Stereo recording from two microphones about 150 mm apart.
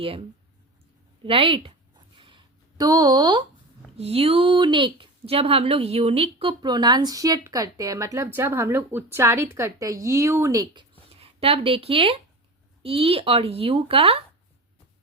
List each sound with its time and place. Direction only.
1.2 s speech: 35° right (ahead or behind)
2.1 s a sound: 35° right (ahead or behind)
3.9 s speech: 40° right (ahead or behind); by 10.8 s 25° right (ahead or behind)
11.1 s a woman's voice: 40° right (ahead or behind)